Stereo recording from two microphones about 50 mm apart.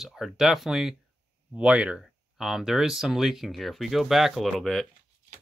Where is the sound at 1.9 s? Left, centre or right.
Centre.